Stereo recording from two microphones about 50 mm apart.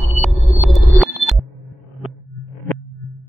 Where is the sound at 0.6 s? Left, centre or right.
Centre.